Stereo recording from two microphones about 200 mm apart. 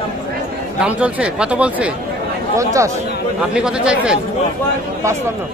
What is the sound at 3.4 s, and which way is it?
Speech, 5° right (ahead or behind).